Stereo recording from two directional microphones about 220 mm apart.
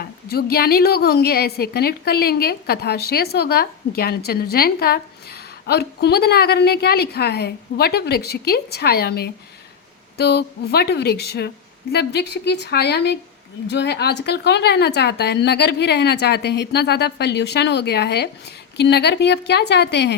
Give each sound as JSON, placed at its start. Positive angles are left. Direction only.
{"t": 0.0, "sound": "a woman's voice", "side_deg": 45}